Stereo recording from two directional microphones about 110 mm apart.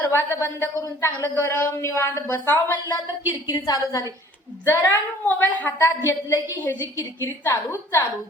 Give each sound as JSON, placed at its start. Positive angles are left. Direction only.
{"t": 0.1, "sound": "speech", "side_deg": 20}
{"t": 3.5, "sound": "a woman's voice", "side_deg": 35}
{"t": 4.6, "sound": "a woman's voice", "side_deg": 20}
{"t": 6.1, "sound": "speech", "side_deg": 25}